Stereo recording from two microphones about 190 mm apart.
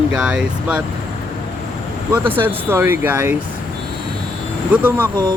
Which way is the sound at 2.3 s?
10° right (ahead or behind).